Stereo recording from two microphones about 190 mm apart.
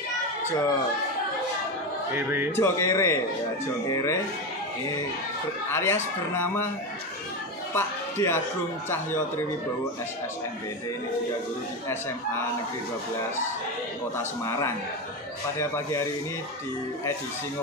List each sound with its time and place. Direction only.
2.5 s speech: 15° left (ahead or behind)
5.7 s speech: 15° left (ahead or behind)
7.7 s speech: 10° left (ahead or behind)